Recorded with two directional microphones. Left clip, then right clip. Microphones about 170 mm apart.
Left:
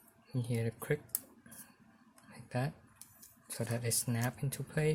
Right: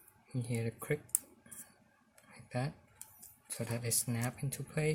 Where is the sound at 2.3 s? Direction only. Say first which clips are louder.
Left 1 dB; 20° left (ahead or behind).